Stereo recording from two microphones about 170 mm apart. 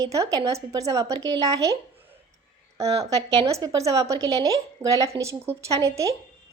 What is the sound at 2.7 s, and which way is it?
A woman's voice, 20° right (ahead or behind).